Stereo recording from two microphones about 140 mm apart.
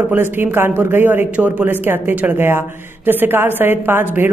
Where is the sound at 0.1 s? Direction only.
15° right (ahead or behind).